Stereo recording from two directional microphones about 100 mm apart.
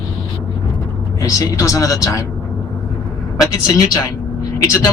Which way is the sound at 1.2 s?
35° left (ahead or behind).